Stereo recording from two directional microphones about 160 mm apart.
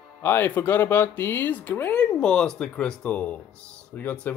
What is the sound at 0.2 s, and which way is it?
Speech, 15° left (ahead or behind).